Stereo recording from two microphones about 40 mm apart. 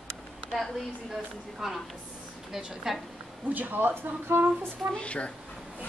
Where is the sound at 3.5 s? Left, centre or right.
Right.